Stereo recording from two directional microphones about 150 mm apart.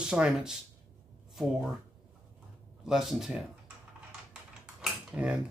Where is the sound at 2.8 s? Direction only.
Centre (ahead or behind).